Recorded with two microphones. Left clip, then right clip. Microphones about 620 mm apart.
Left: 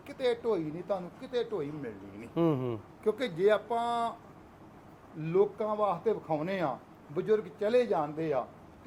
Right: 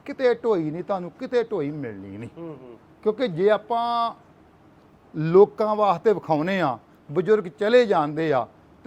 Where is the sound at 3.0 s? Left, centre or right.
Right.